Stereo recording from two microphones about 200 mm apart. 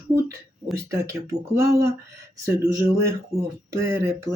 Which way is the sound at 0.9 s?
15° right (ahead or behind).